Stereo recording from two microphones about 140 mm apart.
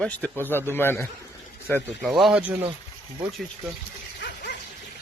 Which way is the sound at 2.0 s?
Centre (ahead or behind).